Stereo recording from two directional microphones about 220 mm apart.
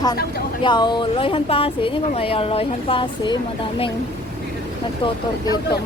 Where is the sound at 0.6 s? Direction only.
20° left (ahead or behind).